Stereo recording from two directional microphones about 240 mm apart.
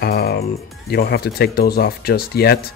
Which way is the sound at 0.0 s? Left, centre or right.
Left.